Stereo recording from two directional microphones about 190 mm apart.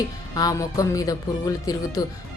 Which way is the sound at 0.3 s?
20° left (ahead or behind).